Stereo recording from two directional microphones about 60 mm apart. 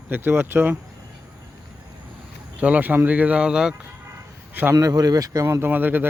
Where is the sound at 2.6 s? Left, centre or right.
Right.